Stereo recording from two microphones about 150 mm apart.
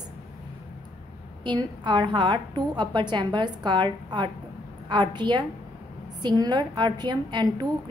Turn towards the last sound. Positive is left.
turn(degrees=-30)  # may be behind; listen again after turning